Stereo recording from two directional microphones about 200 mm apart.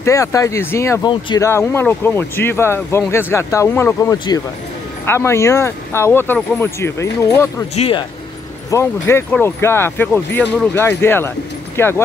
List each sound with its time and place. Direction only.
0.0 s speech: 15° left (ahead or behind)
7.7 s speech: 30° left (ahead or behind)
8.6 s speech: 15° left (ahead or behind)